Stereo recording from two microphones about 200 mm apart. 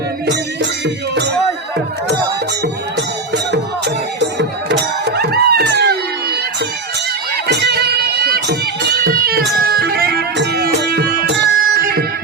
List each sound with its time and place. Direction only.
3.3 s music: 60° right (ahead or behind)
7.4 s music: 55° right (ahead or behind)